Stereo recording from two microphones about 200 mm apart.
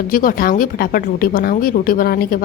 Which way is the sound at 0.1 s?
45° left (ahead or behind).